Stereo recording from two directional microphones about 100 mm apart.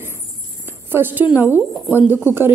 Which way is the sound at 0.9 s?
20° right (ahead or behind).